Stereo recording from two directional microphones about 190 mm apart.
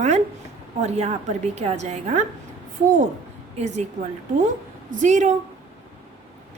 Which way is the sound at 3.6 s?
35° right (ahead or behind).